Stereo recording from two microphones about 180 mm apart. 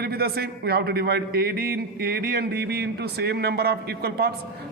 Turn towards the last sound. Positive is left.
turn(degrees=-60)  # may be behind; listen again after turning